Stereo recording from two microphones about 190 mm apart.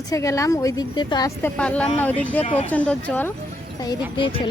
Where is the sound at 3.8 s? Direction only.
25° left (ahead or behind).